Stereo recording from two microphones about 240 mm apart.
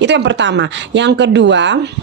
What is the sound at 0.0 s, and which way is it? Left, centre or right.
A woman's voice, right.